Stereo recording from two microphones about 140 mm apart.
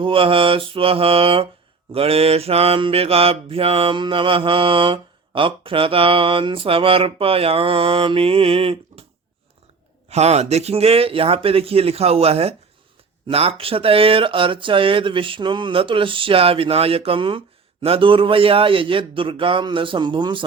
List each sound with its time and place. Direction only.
0.0 s mantra: 40° right (ahead or behind)
10.1 s speech: 50° right (ahead or behind)
13.2 s mantra: 45° right (ahead or behind)